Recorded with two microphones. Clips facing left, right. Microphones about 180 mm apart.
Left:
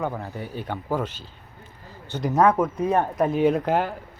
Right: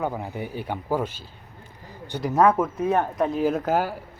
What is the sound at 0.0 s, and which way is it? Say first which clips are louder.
Speech: right 1 dB; 10° right (ahead or behind).